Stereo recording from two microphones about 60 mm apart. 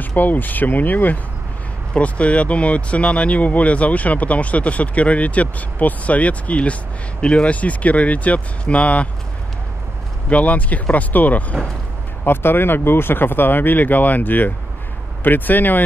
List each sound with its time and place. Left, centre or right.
0.0 s speech: left
10.3 s speech: left
12.3 s speech: left